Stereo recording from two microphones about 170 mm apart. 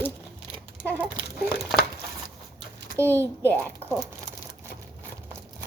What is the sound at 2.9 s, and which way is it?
Speech, 15° right (ahead or behind).